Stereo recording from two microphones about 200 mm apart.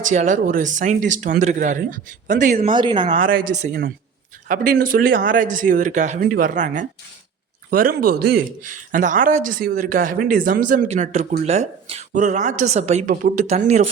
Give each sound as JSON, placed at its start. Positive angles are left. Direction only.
{"t": 0.1, "sound": "speech", "side_deg": -40}
{"t": 2.7, "sound": "speech", "side_deg": -25}
{"t": 3.1, "sound": "speech", "side_deg": -45}